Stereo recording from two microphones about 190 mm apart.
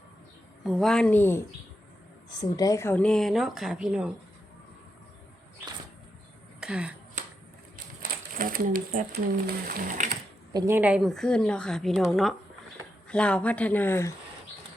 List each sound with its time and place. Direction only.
0.6 s a woman's voice: centre (ahead or behind)
6.6 s a sound: 5° right (ahead or behind)
8.0 s speech: 50° right (ahead or behind)
10.5 s a woman's voice: 10° right (ahead or behind); by 14.1 s 10° left (ahead or behind)